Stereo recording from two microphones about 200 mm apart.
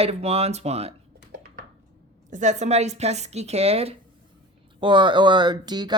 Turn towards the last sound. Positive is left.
turn(degrees=-20)  # may be behind; listen again after turning